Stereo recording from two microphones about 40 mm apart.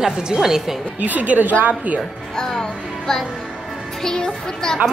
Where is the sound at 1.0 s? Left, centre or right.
Right.